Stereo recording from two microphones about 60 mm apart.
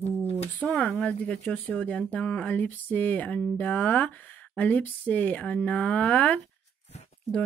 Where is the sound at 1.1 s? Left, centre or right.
Centre.